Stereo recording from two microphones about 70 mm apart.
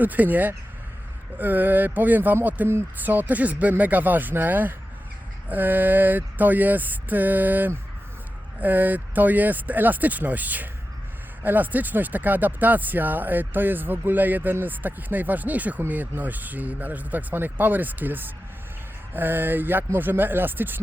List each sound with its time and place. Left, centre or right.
0.0 s speech: right